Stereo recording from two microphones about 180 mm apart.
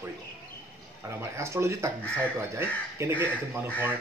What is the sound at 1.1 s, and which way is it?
Speech, 15° right (ahead or behind).